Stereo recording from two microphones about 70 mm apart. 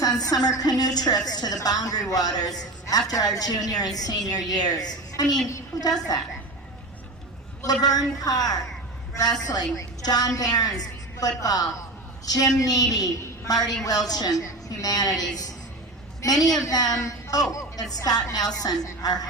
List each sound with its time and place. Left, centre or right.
0.0 s a woman's voice: left
7.6 s a woman's voice: left
9.7 s a woman's voice: left
17.9 s a woman's voice: left